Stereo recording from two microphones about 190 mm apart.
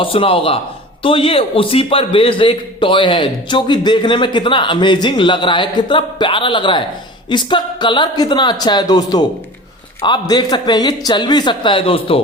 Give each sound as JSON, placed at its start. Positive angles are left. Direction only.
{"t": 0.0, "sound": "a man's voice", "side_deg": 30}